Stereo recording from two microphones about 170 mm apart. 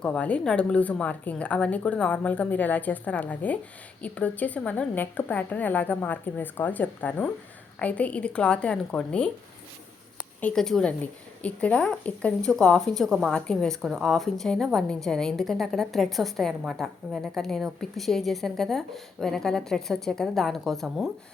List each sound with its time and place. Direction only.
0.0 s a woman's voice: 5° left (ahead or behind)
10.4 s a woman's voice: 5° left (ahead or behind)